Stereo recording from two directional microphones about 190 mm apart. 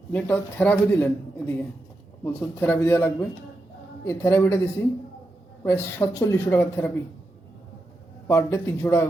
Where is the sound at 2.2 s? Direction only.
10° left (ahead or behind).